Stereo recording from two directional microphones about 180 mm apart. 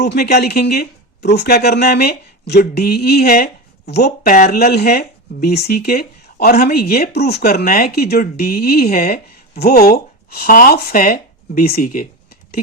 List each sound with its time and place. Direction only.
0.0 s speech: 65° left (ahead or behind); by 12.0 s 50° left (ahead or behind)